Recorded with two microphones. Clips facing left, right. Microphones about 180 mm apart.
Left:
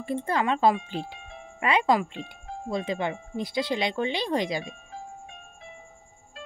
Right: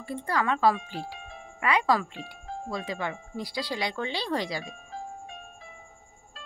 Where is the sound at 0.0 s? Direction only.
25° left (ahead or behind).